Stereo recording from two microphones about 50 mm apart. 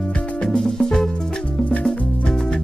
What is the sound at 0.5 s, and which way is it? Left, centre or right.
Music, centre.